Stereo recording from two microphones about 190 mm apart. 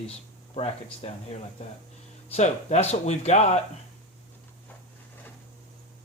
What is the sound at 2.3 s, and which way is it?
Speech, 35° left (ahead or behind).